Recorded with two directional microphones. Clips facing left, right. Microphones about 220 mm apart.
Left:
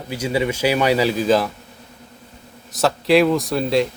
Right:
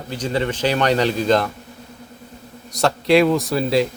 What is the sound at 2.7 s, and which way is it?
A man's voice, centre (ahead or behind).